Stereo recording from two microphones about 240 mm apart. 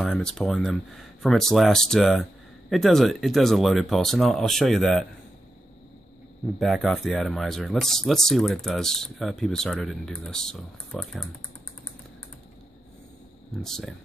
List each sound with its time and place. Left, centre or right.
0.0 s speech: centre
6.6 s speech: centre
13.6 s speech: centre